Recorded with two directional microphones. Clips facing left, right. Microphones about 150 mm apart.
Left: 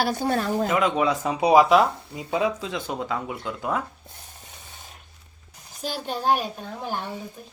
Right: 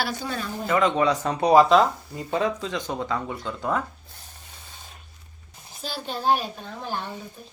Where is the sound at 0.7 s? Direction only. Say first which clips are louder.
Right 4 dB; 5° left (ahead or behind).